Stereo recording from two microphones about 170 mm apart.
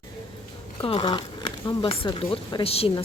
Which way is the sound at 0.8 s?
30° left (ahead or behind).